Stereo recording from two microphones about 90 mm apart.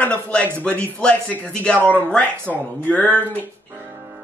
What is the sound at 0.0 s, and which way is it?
Speech, 15° left (ahead or behind).